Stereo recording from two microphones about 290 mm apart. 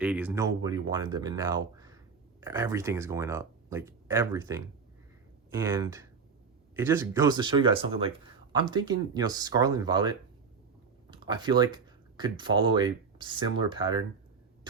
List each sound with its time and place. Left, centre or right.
0.0 s speech: centre